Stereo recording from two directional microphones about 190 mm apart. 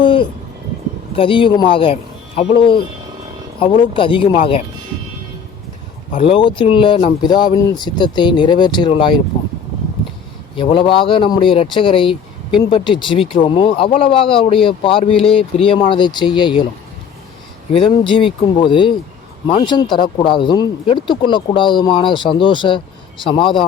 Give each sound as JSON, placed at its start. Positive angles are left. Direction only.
{"t": 0.0, "sound": "speech", "side_deg": 25}
{"t": 6.1, "sound": "speech", "side_deg": 30}
{"t": 10.6, "sound": "speech", "side_deg": 25}
{"t": 17.7, "sound": "speech", "side_deg": 30}